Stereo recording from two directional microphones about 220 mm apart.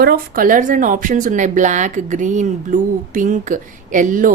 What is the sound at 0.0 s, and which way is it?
A woman's voice, 40° right (ahead or behind).